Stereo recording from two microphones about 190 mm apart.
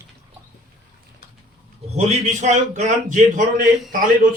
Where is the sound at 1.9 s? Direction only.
35° right (ahead or behind).